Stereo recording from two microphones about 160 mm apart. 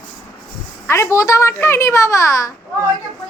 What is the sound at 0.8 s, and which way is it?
A child's voice, 15° left (ahead or behind).